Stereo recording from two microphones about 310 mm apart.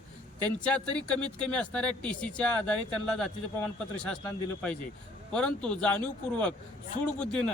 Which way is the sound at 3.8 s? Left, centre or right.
Centre.